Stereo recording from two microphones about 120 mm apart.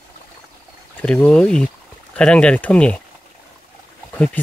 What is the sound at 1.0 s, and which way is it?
Speech, 10° left (ahead or behind).